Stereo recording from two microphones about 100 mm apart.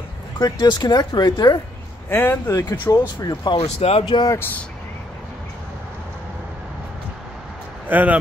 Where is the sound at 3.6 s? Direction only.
80° left.